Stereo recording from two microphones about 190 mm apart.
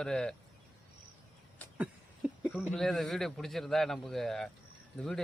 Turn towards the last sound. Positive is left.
turn(degrees=0)  # may be behind; listen again after turning